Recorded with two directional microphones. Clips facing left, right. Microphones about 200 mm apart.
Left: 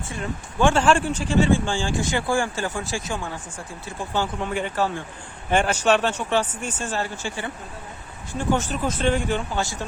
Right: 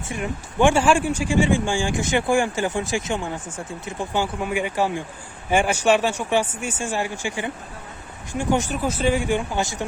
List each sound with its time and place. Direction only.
0.1 s speech: 15° right (ahead or behind)